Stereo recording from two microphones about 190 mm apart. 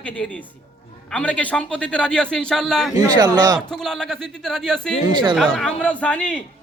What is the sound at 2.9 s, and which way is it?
Speech, 20° right (ahead or behind).